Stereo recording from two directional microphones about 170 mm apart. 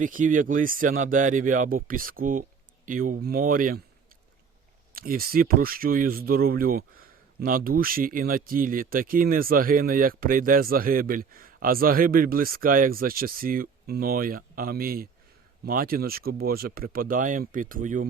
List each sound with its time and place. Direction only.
0.0 s speech: 50° right (ahead or behind)
4.9 s speech: 60° right (ahead or behind)